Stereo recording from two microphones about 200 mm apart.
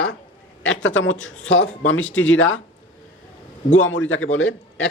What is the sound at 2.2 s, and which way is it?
Speech, 75° left (ahead or behind).